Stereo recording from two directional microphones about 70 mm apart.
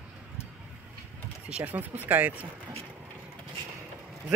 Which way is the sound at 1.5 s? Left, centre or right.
Right.